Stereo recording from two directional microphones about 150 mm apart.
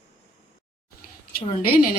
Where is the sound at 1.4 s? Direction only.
85° left.